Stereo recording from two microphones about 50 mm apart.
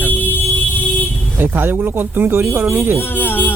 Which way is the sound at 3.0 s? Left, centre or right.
Left.